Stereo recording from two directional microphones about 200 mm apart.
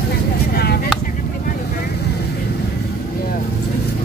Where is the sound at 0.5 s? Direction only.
50° left (ahead or behind).